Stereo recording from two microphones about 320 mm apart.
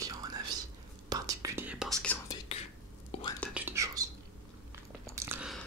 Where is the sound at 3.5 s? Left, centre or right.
Centre.